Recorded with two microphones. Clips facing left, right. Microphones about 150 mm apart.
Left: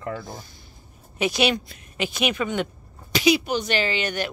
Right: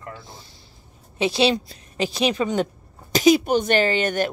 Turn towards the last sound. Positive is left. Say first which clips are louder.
# right 5 dB
turn(degrees=-45)  # may be behind; listen again after turning